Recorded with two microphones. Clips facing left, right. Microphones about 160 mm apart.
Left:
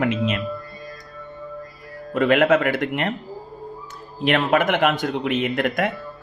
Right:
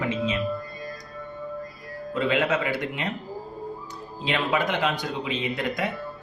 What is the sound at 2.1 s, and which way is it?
Speech, 65° left (ahead or behind).